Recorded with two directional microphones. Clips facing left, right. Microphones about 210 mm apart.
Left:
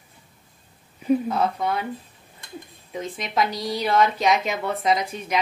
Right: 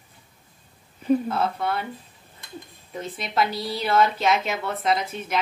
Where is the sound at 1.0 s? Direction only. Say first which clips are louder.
Even; 5° left (ahead or behind).